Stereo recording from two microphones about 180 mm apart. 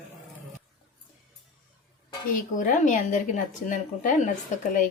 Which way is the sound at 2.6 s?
45° left (ahead or behind).